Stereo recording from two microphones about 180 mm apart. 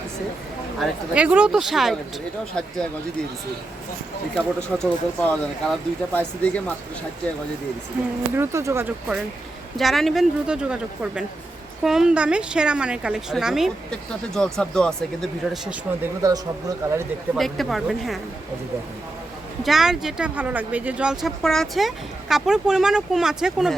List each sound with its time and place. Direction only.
0.8 s speech: 5° right (ahead or behind)
4.4 s speech: 5° left (ahead or behind)
8.4 s speech: 15° right (ahead or behind); by 15.7 s 5° left (ahead or behind)
16.2 s speech: 20° right (ahead or behind)
17.3 s speech: centre (ahead or behind)
19.6 s speech: centre (ahead or behind)